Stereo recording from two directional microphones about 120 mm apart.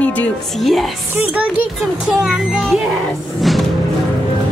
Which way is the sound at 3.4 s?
Centre (ahead or behind).